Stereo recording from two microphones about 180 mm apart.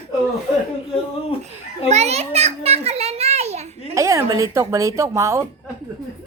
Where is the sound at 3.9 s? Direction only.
15° right (ahead or behind).